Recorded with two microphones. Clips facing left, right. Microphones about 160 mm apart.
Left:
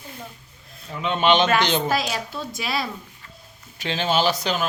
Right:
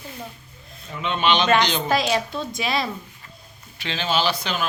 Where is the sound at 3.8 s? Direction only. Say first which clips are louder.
Left 2 dB; 45° left (ahead or behind).